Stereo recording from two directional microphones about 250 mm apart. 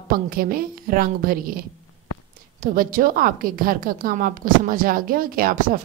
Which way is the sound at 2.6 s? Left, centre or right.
Right.